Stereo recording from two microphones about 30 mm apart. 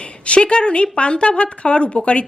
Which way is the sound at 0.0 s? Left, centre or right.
Left.